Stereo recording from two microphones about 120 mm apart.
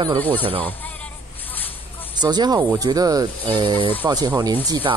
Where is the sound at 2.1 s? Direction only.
35° right (ahead or behind).